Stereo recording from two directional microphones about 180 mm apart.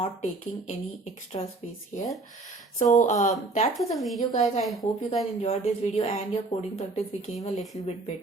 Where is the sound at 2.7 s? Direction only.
45° left (ahead or behind).